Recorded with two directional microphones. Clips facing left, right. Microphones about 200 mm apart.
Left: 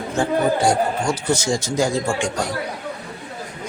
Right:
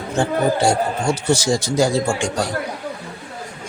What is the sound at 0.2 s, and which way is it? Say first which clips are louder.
Speech: right 1 dB; 25° right (ahead or behind).